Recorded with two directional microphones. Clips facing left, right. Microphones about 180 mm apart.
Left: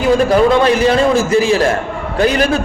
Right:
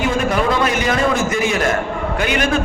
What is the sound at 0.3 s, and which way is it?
A man's voice, 30° left (ahead or behind).